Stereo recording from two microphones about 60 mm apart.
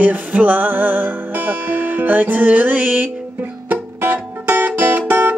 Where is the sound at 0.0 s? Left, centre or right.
Right.